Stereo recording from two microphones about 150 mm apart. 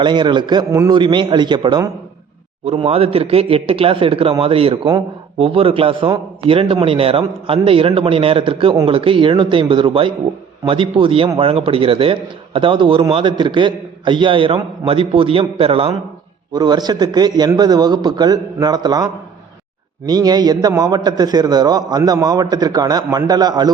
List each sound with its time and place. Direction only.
0.0 s a man's voice: 30° right (ahead or behind)
0.7 s a man's voice: 20° right (ahead or behind)
0.9 s a man's voice: 30° right (ahead or behind)
16.5 s a man's voice: 30° right (ahead or behind)